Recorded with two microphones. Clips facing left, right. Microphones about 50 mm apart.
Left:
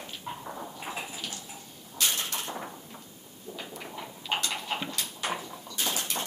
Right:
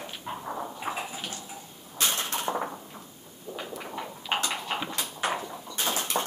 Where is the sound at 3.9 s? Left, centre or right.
Right.